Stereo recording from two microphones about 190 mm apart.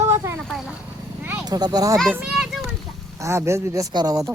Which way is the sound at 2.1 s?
5° right (ahead or behind).